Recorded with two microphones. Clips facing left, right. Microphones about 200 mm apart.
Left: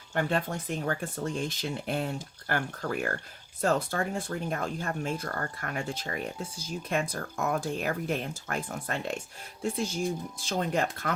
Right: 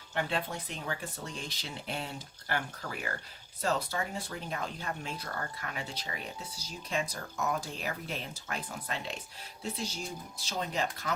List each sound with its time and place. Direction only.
0.1 s speech: 45° left (ahead or behind)